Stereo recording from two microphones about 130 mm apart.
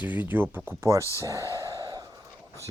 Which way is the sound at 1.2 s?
25° right (ahead or behind).